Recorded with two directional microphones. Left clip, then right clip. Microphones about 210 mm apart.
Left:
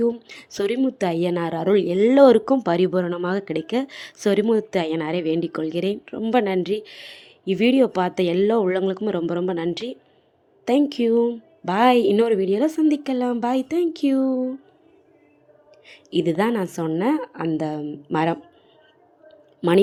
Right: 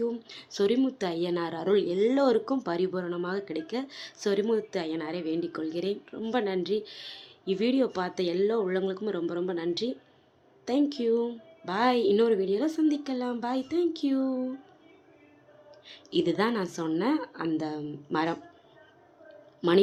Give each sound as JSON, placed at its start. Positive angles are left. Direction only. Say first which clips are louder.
{"t": 0.0, "sound": "speech", "louder": "left 9 dB", "side_deg": 35}
{"t": 15.9, "sound": "speech", "louder": "left 5 dB", "side_deg": 30}